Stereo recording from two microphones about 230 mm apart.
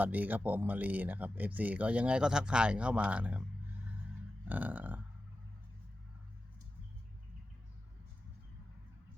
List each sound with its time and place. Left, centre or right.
0.0 s speech: centre
4.4 s speech: centre